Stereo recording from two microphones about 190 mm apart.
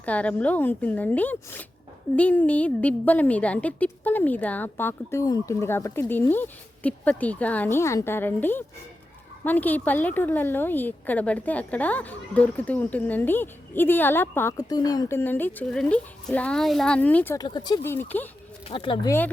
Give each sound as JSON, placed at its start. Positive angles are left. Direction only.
{"t": 0.0, "sound": "a woman's voice", "side_deg": 5}
{"t": 17.3, "sound": "a woman's voice", "side_deg": 20}
{"t": 18.7, "sound": "speech", "side_deg": 25}